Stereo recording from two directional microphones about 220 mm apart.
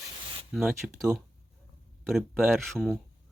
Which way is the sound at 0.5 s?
Centre (ahead or behind).